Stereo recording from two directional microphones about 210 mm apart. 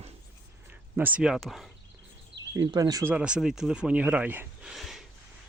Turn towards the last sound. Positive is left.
turn(degrees=0)  # may be behind; listen again after turning